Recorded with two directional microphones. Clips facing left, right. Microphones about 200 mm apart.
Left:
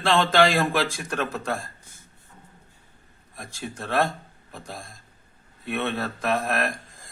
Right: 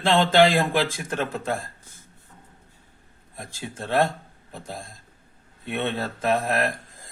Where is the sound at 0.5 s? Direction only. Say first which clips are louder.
Right 1 dB; 20° right (ahead or behind).